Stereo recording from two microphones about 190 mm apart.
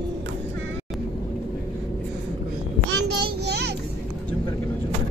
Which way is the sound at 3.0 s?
60° right (ahead or behind).